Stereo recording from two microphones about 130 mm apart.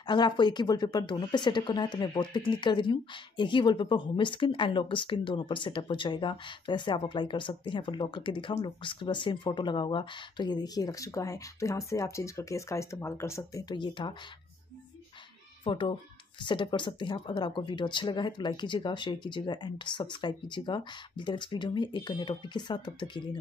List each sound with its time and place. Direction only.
0.0 s speech: 35° left (ahead or behind)
15.6 s speech: 40° left (ahead or behind)